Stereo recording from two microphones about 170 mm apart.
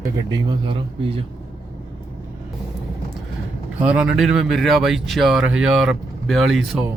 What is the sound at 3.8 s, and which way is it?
Speech, 5° right (ahead or behind).